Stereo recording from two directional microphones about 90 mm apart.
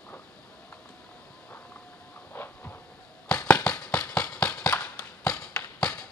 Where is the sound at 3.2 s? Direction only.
15° left (ahead or behind).